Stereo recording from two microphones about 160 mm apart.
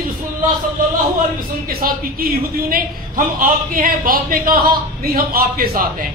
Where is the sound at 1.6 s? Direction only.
65° right (ahead or behind).